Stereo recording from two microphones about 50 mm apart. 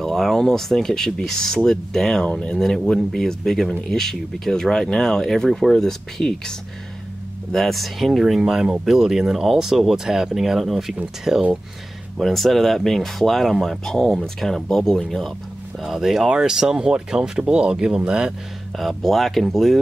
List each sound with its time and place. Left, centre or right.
0.0 s speech: centre
7.5 s speech: centre
12.2 s speech: centre
15.8 s speech: centre
18.8 s speech: centre